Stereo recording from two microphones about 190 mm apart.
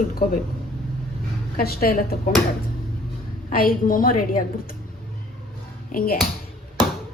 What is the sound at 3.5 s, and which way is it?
A woman's voice, 50° left (ahead or behind).